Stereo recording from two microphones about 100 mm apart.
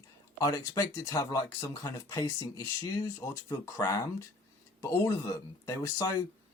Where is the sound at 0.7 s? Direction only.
35° left (ahead or behind).